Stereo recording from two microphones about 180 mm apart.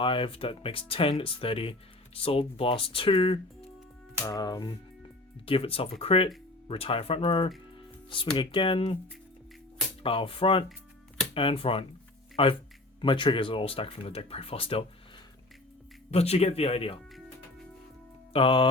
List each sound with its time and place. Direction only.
0.0 s speech: 30° left (ahead or behind)
10.0 s speech: 30° left (ahead or behind)
16.1 s speech: 35° left (ahead or behind)
18.3 s speech: 30° left (ahead or behind)